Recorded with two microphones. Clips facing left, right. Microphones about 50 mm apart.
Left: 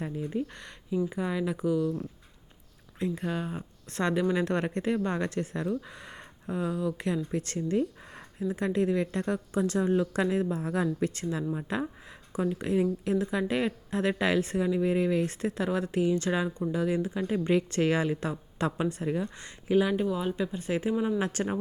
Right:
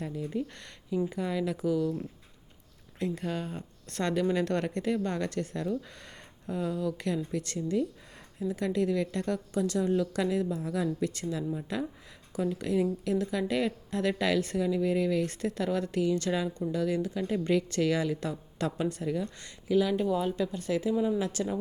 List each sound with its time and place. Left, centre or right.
0.0 s speech: centre
3.0 s a woman's voice: centre
7.3 s a woman's voice: left
20.1 s a woman's voice: centre; by 21.6 s left